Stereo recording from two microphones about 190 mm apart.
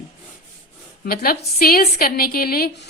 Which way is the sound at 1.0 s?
55° left (ahead or behind).